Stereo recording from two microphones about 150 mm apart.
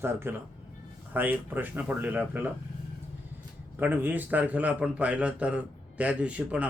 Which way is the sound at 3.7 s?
10° right (ahead or behind).